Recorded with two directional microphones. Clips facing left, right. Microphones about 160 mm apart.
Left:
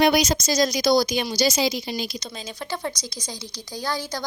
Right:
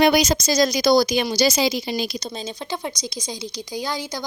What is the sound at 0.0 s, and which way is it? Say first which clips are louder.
A woman's voice: right 2 dB; 90° right.